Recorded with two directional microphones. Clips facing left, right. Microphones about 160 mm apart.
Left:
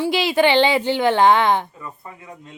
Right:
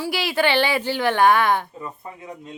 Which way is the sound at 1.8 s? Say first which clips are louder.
Right 2 dB; 20° right (ahead or behind).